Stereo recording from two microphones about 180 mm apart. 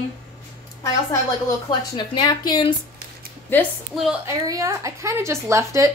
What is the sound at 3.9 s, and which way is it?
Speech, centre (ahead or behind).